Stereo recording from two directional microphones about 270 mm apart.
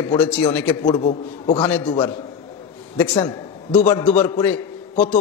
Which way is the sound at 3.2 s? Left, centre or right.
Centre.